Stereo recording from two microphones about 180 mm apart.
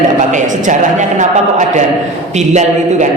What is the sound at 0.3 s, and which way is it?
A man's voice, 45° right (ahead or behind).